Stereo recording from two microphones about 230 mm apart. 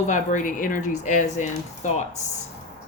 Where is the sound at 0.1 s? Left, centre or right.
Left.